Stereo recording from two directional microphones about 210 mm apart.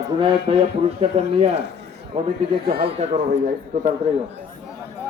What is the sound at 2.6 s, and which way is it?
Speech, 50° right (ahead or behind).